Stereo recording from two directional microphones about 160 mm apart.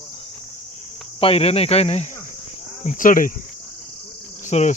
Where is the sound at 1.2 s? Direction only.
40° left (ahead or behind).